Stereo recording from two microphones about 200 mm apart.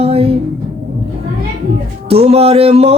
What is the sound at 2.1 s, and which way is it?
Music, 30° right (ahead or behind).